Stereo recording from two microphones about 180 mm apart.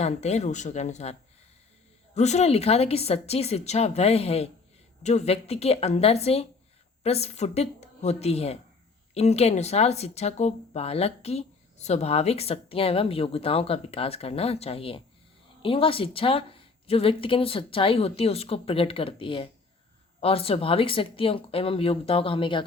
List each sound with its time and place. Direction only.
0.0 s speech: 40° left (ahead or behind)
2.1 s speech: 40° left (ahead or behind)